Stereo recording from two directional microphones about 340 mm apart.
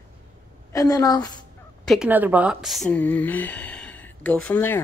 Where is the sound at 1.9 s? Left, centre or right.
Centre.